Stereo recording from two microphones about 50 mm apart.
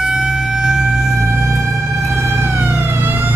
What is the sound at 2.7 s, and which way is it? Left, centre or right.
Emergency vehicle, right.